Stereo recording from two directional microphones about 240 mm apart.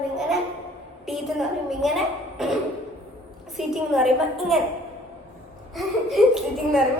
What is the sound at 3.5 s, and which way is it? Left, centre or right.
A woman's voice, centre.